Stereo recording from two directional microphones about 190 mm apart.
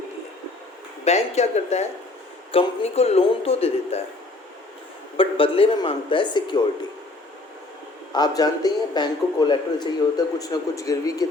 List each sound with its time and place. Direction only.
1.0 s a man's voice: 35° left (ahead or behind)
5.1 s a man's voice: 30° left (ahead or behind)
8.1 s a man's voice: 20° left (ahead or behind)